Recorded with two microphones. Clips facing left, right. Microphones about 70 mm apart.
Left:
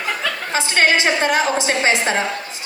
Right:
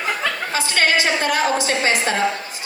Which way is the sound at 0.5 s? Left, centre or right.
Left.